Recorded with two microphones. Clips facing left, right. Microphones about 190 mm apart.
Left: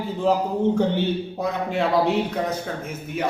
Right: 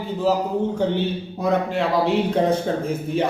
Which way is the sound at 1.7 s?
Centre (ahead or behind).